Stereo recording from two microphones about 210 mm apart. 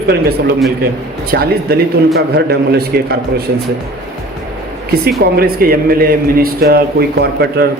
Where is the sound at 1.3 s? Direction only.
50° right (ahead or behind).